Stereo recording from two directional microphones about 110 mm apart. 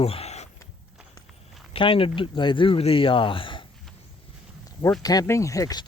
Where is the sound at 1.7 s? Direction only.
55° left (ahead or behind).